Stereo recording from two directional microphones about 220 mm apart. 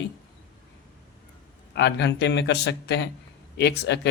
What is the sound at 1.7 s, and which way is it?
Speech, 50° left (ahead or behind).